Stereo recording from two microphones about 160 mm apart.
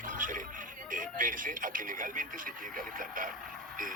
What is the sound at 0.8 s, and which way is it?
Speech, 55° right (ahead or behind).